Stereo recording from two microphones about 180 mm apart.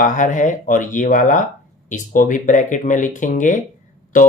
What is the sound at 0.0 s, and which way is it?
Speech, 45° left (ahead or behind).